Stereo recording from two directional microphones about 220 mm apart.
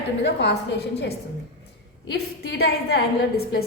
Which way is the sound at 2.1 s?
45° left (ahead or behind).